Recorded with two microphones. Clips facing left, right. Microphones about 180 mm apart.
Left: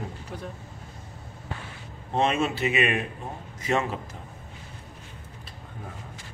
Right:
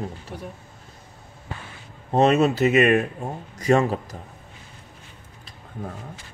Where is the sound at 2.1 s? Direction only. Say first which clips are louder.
Right 7 dB; 40° right (ahead or behind).